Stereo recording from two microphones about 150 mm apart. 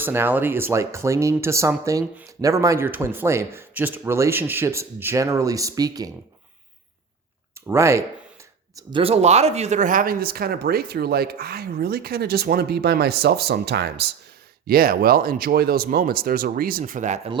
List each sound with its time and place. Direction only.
0.0 s speech: 15° right (ahead or behind)
7.7 s speech: 20° right (ahead or behind)
8.9 s speech: 40° right (ahead or behind); by 17.2 s 55° right (ahead or behind)